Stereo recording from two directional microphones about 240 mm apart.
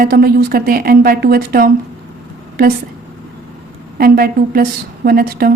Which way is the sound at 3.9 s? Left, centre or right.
Right.